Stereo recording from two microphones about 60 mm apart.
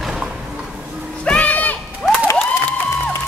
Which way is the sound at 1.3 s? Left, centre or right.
Left.